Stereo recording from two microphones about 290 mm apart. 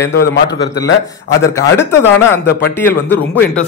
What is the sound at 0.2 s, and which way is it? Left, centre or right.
Speech, left.